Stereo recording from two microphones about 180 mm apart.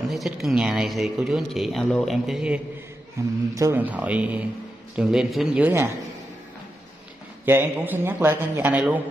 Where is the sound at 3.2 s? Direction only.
15° right (ahead or behind).